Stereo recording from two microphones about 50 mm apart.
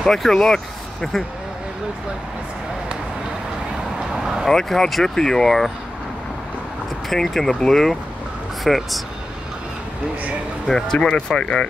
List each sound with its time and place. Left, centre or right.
0.0 s speech: centre
4.1 s vehicle: centre
4.5 s speech: centre
7.1 s speech: centre
10.7 s speech: centre